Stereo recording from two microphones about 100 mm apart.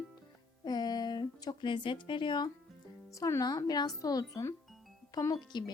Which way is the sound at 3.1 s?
35° left (ahead or behind).